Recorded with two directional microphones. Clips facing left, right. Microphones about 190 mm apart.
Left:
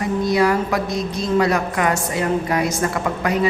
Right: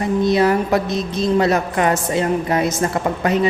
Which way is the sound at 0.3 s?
25° right (ahead or behind).